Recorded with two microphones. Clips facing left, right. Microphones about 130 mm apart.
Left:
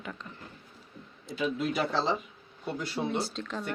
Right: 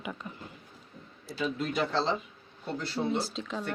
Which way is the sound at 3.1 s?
Centre (ahead or behind).